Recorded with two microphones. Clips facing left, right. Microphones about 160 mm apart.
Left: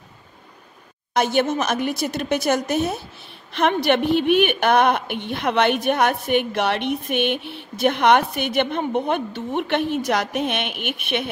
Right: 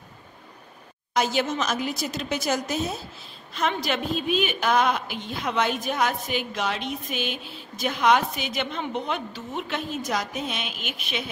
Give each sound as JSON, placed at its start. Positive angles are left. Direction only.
{"t": 1.1, "sound": "a woman's voice", "side_deg": 60}